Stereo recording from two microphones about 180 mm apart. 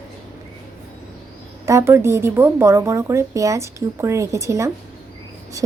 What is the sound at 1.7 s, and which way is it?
Speech, 15° right (ahead or behind).